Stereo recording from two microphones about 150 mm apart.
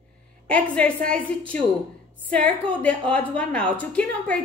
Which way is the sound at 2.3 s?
10° left (ahead or behind).